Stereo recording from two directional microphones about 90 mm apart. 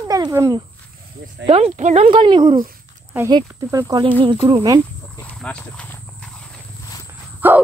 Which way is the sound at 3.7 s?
45° right (ahead or behind).